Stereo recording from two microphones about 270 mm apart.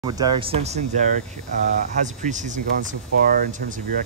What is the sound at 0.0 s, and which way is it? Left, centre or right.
Speech, centre.